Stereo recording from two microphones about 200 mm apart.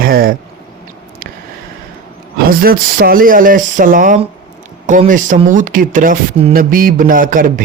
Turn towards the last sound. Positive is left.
turn(degrees=-45)  # may be behind; listen again after turning